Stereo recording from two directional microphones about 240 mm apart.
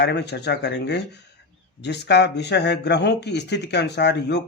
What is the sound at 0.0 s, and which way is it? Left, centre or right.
Speech, left.